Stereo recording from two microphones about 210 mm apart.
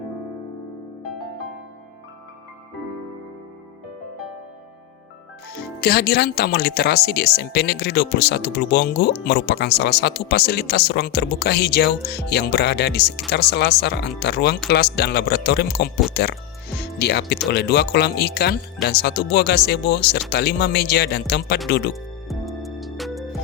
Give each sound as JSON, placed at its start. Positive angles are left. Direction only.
{"t": 5.8, "sound": "speech", "side_deg": 50}
{"t": 21.9, "sound": "music", "side_deg": 0}